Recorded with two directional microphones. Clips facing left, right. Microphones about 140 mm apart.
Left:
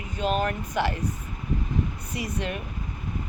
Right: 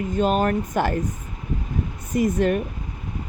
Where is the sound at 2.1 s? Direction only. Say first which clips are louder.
Right 11 dB; 50° right (ahead or behind).